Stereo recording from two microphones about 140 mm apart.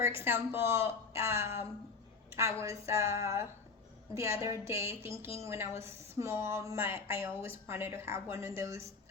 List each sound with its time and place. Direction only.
0.3 s a woman's voice: 15° right (ahead or behind)